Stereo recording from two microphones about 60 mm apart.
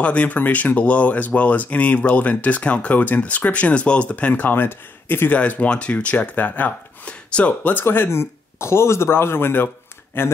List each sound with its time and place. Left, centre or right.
0.0 s speech: left
5.3 s speech: left
7.1 s speech: centre
7.7 s speech: left